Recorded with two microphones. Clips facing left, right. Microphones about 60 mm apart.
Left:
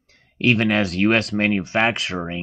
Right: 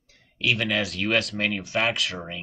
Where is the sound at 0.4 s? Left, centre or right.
Left.